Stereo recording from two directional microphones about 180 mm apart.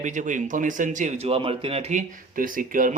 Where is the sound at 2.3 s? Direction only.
50° right (ahead or behind).